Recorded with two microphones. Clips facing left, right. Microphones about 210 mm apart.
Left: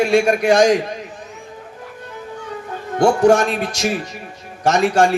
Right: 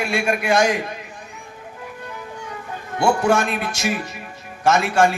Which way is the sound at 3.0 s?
45° left (ahead or behind).